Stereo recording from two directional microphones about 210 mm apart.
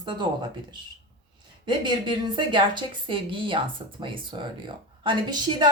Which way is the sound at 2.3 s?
20° right (ahead or behind).